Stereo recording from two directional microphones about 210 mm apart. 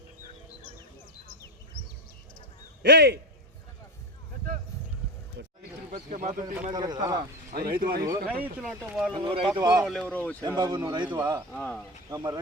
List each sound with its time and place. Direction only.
2.8 s speech: 55° right (ahead or behind)
5.9 s speech: 35° right (ahead or behind)
6.4 s speech: 15° right (ahead or behind)
7.5 s speech: 45° right (ahead or behind)
8.0 s speech: 15° right (ahead or behind)
8.5 s speech: 5° right (ahead or behind)
9.2 s a man's voice: 25° right (ahead or behind)
9.8 s speech: 5° left (ahead or behind)
10.4 s a man's voice: 20° right (ahead or behind)
11.5 s speech: 5° left (ahead or behind)
12.1 s speech: 20° right (ahead or behind)